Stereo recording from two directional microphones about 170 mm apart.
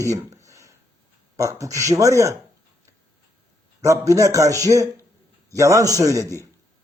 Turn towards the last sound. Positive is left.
turn(degrees=-20)  # may be behind; listen again after turning